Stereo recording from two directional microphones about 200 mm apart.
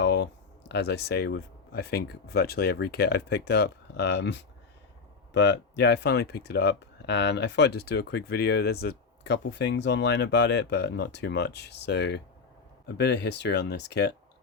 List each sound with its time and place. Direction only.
0.0 s speech: 60° left (ahead or behind)